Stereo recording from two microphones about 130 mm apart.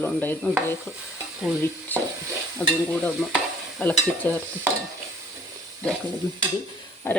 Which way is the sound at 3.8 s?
15° left (ahead or behind).